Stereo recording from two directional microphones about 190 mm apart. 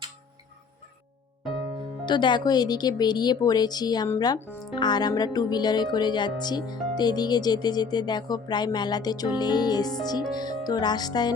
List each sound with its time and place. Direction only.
2.0 s speech: 25° left (ahead or behind)